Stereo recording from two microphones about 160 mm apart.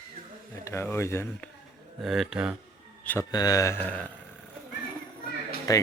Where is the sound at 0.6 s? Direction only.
15° left (ahead or behind).